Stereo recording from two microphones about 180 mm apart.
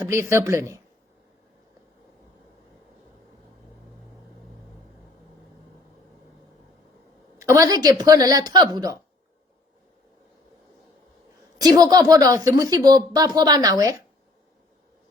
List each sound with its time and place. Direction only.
0.0 s a woman's voice: 15° right (ahead or behind)
7.3 s speech: 15° right (ahead or behind)
11.5 s speech: 20° right (ahead or behind)